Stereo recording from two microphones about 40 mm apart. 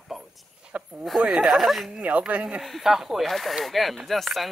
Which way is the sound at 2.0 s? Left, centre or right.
Right.